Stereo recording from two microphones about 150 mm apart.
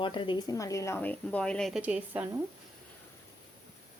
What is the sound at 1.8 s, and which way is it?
Speech, 10° right (ahead or behind).